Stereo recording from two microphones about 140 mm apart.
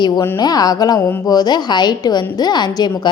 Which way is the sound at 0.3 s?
30° left (ahead or behind).